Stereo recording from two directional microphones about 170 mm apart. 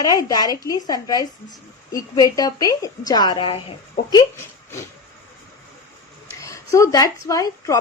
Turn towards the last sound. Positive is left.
turn(degrees=20)  # may be behind; listen again after turning